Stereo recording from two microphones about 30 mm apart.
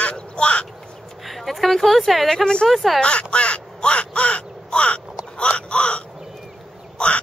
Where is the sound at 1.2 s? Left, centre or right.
Centre.